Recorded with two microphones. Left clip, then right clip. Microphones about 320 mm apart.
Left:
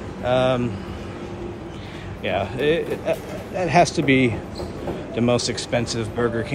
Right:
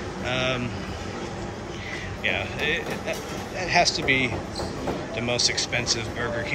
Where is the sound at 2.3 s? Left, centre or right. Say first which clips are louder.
Left 7 dB; centre.